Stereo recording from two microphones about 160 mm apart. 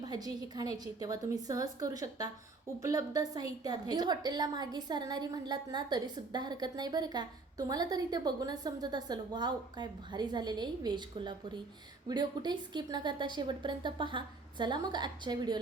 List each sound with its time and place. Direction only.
0.0 s a woman's voice: 25° right (ahead or behind)